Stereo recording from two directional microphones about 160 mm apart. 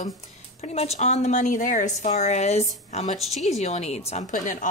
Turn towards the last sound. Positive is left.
turn(degrees=55)  # may be behind; listen again after turning